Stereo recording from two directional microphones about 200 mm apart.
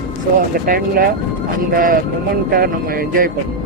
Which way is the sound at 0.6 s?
45° right (ahead or behind).